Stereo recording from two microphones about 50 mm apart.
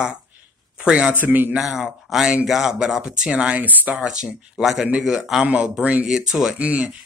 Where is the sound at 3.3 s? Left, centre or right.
Right.